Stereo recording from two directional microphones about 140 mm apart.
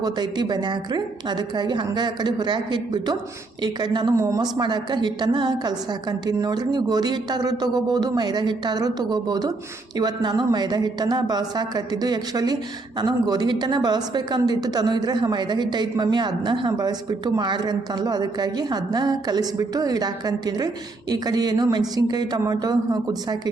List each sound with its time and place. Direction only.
0.0 s a woman's voice: 30° right (ahead or behind)